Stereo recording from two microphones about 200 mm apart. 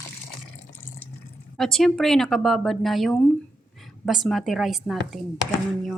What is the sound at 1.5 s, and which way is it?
Speech, centre (ahead or behind).